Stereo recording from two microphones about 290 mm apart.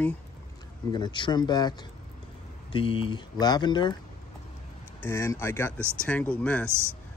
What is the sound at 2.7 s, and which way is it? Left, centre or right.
Speech, centre.